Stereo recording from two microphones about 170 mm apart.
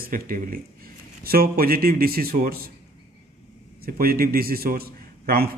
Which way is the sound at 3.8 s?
60° right (ahead or behind).